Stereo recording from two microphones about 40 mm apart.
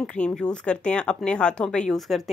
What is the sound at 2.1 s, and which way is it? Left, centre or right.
Speech, centre.